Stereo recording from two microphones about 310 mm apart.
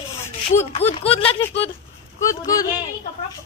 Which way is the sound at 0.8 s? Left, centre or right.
Centre.